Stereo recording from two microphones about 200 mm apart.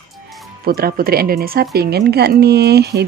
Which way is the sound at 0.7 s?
50° right (ahead or behind).